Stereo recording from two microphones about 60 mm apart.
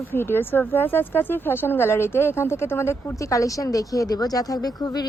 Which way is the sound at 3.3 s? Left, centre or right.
Left.